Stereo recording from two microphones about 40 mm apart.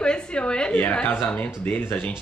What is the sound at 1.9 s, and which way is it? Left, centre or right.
Speech, left.